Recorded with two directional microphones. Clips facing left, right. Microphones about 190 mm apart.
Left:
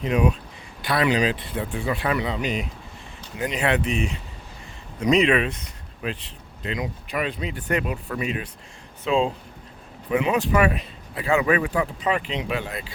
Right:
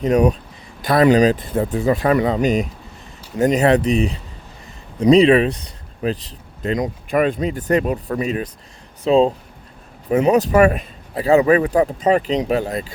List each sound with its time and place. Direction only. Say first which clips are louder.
0.0 s speech: right 7 dB; 40° right (ahead or behind)